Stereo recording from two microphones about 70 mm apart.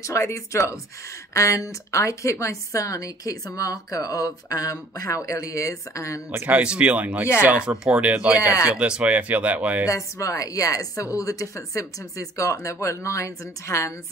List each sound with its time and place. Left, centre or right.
0.0 s a woman's voice: left
6.4 s speech: centre
9.8 s a woman's voice: left